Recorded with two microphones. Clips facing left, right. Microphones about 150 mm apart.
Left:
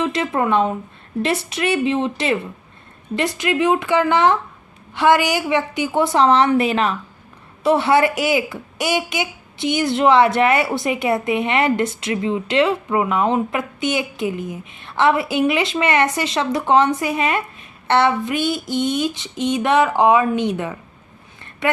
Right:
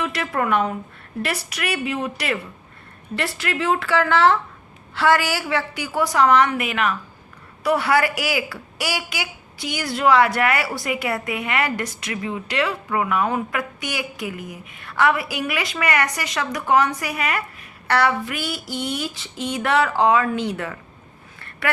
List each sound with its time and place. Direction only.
0.0 s speech: 20° left (ahead or behind)